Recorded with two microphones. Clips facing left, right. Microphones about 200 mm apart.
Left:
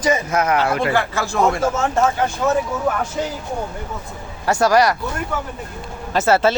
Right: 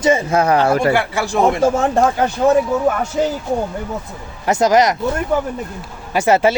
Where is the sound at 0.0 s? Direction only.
25° right (ahead or behind).